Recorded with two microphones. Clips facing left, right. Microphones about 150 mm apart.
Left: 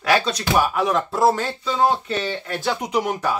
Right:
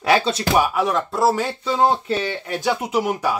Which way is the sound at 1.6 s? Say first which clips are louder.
Right 1 dB; 25° right (ahead or behind).